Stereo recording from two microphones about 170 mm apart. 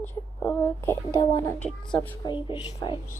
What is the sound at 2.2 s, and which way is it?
Speech, 30° left (ahead or behind).